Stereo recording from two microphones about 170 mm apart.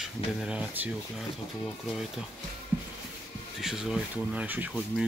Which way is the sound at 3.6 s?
Centre (ahead or behind).